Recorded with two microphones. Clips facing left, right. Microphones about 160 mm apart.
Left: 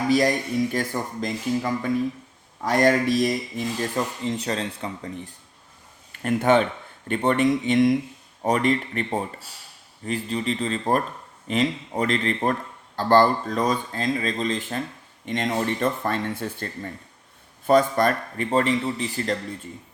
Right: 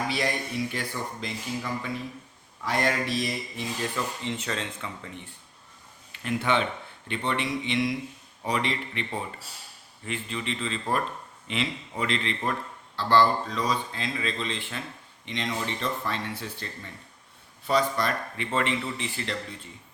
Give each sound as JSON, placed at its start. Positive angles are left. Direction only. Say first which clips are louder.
{"t": 0.1, "sound": "speech", "louder": "left 9 dB", "side_deg": 45}
{"t": 6.1, "sound": "speech", "louder": "left 7 dB", "side_deg": 45}